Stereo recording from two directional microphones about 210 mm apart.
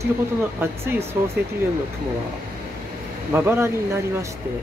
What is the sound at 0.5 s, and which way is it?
Speech, 10° right (ahead or behind).